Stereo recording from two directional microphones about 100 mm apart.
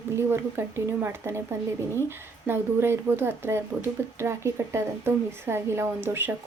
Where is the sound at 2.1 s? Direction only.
25° right (ahead or behind).